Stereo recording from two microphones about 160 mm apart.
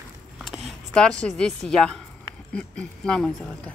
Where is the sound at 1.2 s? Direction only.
5° left (ahead or behind).